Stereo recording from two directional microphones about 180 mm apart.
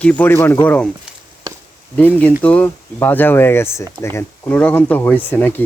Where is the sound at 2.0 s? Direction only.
10° left (ahead or behind).